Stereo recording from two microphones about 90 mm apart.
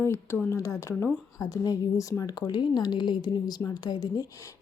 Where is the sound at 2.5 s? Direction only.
55° left (ahead or behind).